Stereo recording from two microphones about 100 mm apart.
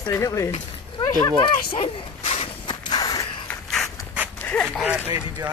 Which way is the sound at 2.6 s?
40° left (ahead or behind).